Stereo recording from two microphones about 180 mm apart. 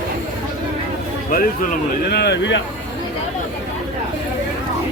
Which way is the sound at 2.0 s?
65° left (ahead or behind).